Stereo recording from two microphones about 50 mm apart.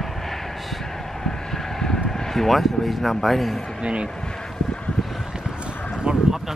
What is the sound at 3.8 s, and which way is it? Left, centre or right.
Speech, centre.